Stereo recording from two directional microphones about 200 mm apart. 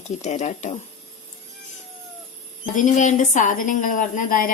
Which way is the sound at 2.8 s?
40° left (ahead or behind).